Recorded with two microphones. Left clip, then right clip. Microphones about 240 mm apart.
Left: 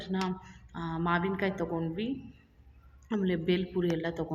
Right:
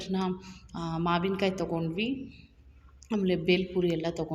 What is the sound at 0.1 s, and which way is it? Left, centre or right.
A woman's voice, centre.